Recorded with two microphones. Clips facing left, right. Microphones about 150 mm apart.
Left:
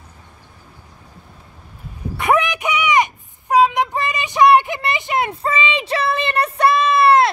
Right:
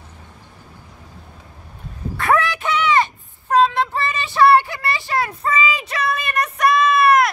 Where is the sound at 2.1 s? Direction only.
20° left (ahead or behind).